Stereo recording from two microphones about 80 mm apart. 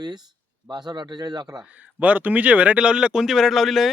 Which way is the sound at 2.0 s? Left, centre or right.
Right.